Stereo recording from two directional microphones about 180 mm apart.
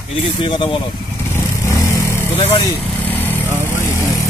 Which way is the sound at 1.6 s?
15° left (ahead or behind).